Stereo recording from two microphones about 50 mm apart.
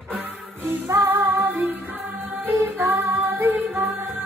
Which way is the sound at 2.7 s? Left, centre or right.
Right.